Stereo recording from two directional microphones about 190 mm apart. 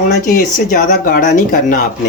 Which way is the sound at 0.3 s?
45° left (ahead or behind).